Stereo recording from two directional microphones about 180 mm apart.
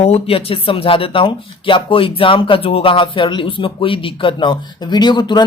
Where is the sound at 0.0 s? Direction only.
35° left (ahead or behind).